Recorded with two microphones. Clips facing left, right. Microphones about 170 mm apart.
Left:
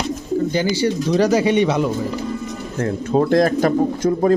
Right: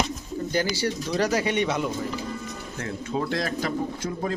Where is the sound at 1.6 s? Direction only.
90° left.